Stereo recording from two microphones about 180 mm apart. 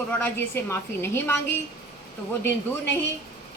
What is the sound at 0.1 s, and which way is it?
A woman's voice, 10° left (ahead or behind).